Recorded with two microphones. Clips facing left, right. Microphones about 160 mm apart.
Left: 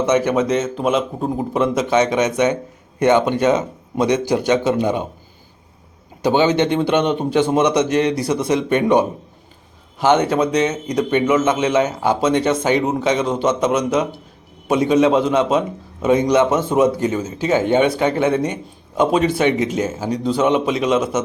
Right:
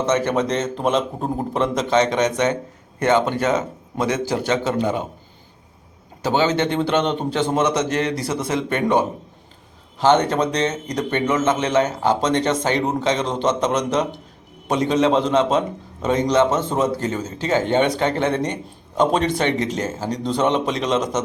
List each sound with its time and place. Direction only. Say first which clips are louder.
0.0 s a man's voice: left 3 dB; 10° left (ahead or behind)
6.2 s a man's voice: left 4 dB; 15° left (ahead or behind)